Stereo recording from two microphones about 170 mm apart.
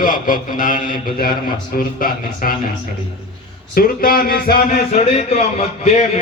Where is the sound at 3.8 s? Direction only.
60° left (ahead or behind).